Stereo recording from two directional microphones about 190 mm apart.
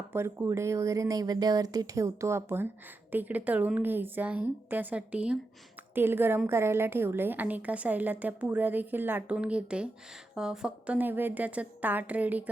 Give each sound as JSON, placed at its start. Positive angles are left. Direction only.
{"t": 0.1, "sound": "a woman's voice", "side_deg": -10}